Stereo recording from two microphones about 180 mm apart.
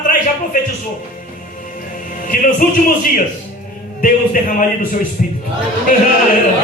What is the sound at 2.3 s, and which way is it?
Speech, 50° left (ahead or behind).